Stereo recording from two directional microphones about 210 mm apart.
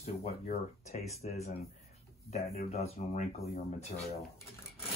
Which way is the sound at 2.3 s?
30° left (ahead or behind).